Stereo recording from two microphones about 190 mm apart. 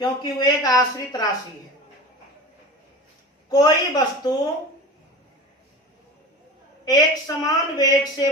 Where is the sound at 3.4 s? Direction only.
20° left (ahead or behind).